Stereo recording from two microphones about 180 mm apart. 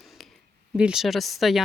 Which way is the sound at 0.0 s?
Centre (ahead or behind).